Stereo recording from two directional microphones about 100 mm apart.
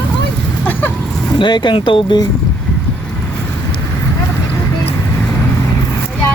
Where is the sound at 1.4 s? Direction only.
50° left (ahead or behind).